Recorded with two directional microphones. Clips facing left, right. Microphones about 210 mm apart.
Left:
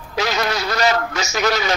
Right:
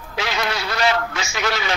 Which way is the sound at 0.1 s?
40° left (ahead or behind).